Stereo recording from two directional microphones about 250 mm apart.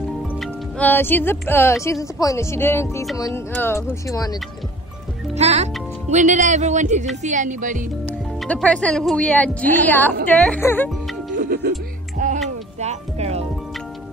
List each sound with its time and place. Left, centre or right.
0.4 s speech: centre
5.3 s music: right
7.2 s speech: right
8.4 s speech: centre
11.3 s music: right